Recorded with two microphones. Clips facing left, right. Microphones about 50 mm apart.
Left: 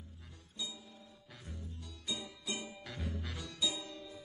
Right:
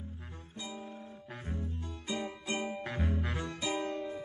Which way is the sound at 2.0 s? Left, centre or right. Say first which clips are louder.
Right 5 dB; right.